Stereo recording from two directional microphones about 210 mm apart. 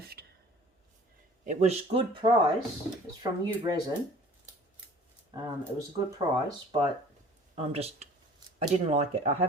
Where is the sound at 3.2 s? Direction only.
20° right (ahead or behind).